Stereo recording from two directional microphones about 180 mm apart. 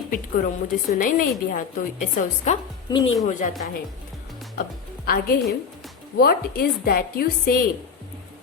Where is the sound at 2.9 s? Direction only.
25° left (ahead or behind).